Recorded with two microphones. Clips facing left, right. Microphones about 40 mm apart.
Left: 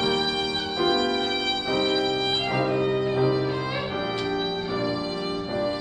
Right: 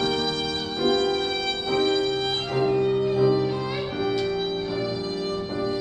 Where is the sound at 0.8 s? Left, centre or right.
Centre.